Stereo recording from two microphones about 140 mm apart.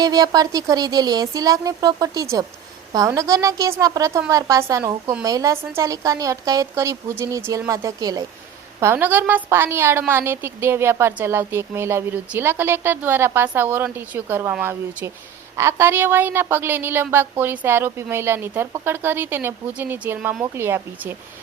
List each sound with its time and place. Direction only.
0.0 s speech: 25° right (ahead or behind)
8.8 s a woman's voice: 15° right (ahead or behind)